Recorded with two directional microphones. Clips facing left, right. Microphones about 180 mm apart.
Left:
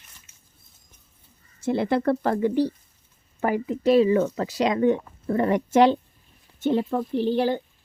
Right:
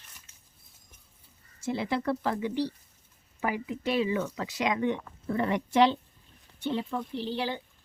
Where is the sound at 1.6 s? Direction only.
55° left (ahead or behind).